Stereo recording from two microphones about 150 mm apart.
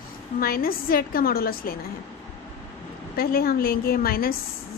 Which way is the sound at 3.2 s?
85° left.